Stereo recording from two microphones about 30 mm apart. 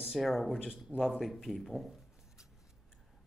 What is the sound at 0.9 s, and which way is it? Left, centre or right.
Speech, left.